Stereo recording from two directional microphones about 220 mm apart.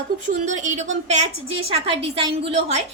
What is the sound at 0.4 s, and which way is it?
A woman's voice, 35° right (ahead or behind).